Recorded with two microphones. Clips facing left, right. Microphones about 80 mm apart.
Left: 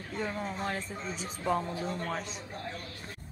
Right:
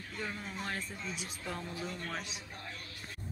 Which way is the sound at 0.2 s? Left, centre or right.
Centre.